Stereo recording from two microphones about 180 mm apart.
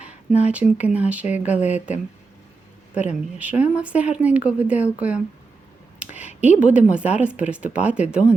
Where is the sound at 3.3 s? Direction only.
5° right (ahead or behind).